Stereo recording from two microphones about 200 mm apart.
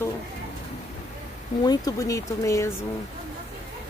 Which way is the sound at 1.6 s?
20° left (ahead or behind).